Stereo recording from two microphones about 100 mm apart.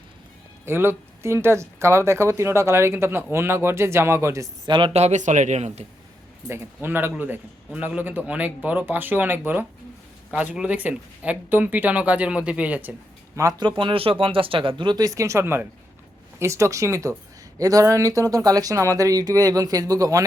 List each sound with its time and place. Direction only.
0.6 s speech: 20° right (ahead or behind)
4.6 s speech: 55° right (ahead or behind)
6.8 s speech: 20° right (ahead or behind)
13.6 s speech: 50° right (ahead or behind)
15.0 s speech: 30° right (ahead or behind)